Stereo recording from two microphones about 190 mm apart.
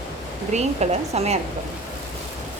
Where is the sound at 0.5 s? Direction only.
35° right (ahead or behind).